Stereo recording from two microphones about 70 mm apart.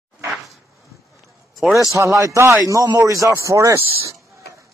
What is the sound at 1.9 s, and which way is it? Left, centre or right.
Speech, right.